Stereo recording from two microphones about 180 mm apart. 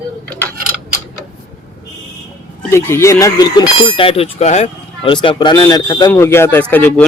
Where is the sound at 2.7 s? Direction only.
15° left (ahead or behind).